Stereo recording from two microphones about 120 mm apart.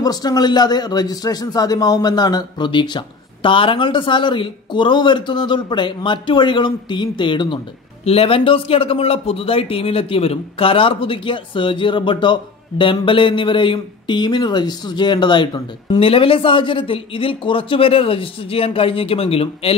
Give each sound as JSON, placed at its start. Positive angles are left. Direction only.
{"t": 0.0, "sound": "speech", "side_deg": 35}
{"t": 8.0, "sound": "a man's voice", "side_deg": 55}